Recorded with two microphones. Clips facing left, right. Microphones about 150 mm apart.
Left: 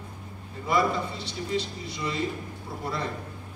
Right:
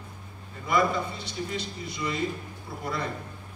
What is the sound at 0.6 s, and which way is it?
A man's voice, 30° left (ahead or behind).